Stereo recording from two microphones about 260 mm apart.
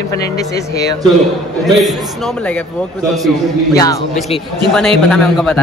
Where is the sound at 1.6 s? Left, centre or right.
Centre.